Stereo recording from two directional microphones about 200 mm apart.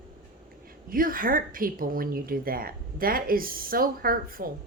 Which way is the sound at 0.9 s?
45° right (ahead or behind).